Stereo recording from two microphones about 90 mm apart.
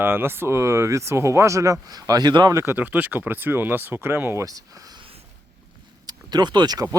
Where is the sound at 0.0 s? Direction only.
25° right (ahead or behind); by 2.5 s 50° right (ahead or behind).